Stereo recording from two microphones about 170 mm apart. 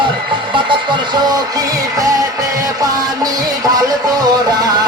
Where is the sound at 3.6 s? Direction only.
20° right (ahead or behind).